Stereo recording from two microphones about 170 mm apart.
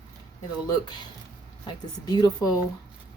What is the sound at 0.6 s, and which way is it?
Speech, 25° left (ahead or behind).